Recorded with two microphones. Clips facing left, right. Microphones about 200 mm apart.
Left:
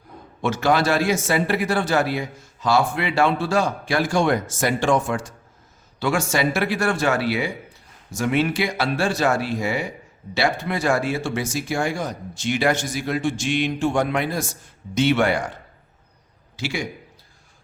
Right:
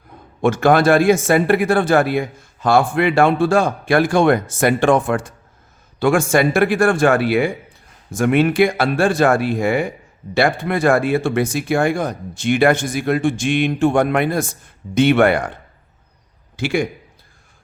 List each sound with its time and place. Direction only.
0.4 s a man's voice: 55° right (ahead or behind)
16.6 s speech: 55° right (ahead or behind)